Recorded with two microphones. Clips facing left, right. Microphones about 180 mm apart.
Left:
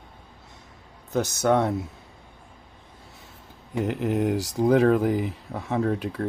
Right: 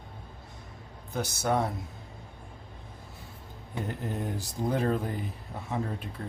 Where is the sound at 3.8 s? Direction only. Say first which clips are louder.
Left 10 dB; 90° left.